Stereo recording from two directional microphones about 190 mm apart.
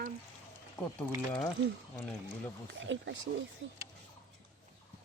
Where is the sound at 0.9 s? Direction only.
5° left (ahead or behind).